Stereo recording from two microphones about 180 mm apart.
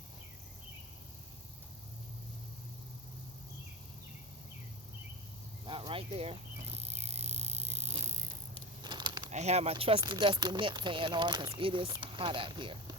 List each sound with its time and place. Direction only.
5.6 s cricket: 30° right (ahead or behind)
8.8 s crumpling: 25° right (ahead or behind)
9.3 s speech: 40° right (ahead or behind)